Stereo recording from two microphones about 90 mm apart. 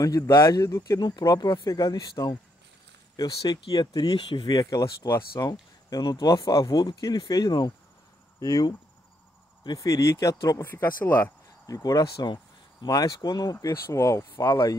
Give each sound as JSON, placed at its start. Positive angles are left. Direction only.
{"t": 0.0, "sound": "speech", "side_deg": 35}
{"t": 1.0, "sound": "speech", "side_deg": 50}
{"t": 1.7, "sound": "speech", "side_deg": 40}
{"t": 4.3, "sound": "speech", "side_deg": 75}
{"t": 4.6, "sound": "speech", "side_deg": 40}
{"t": 5.5, "sound": "speech", "side_deg": 45}
{"t": 10.6, "sound": "speech", "side_deg": 20}
{"t": 11.6, "sound": "speech", "side_deg": 40}
{"t": 12.0, "sound": "speech", "side_deg": 55}
{"t": 12.8, "sound": "speech", "side_deg": 45}
{"t": 13.7, "sound": "speech", "side_deg": 30}